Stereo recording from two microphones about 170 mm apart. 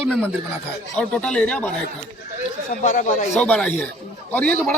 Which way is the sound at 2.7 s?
50° left (ahead or behind).